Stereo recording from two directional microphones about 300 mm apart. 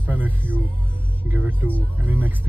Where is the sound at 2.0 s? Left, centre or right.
Centre.